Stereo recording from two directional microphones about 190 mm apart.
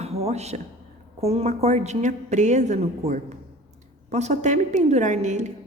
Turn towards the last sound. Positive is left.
turn(degrees=-40)  # may be behind; listen again after turning